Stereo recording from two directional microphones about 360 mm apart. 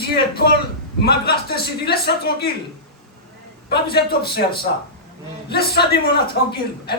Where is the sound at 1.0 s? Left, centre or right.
Left.